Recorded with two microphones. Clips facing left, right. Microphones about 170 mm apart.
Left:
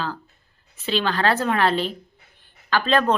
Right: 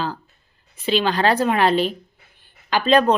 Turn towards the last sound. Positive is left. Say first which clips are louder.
# right 4 dB
turn(degrees=-15)  # may be behind; listen again after turning